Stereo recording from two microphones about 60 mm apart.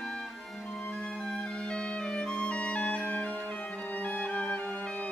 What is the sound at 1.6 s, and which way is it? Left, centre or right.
Music, centre.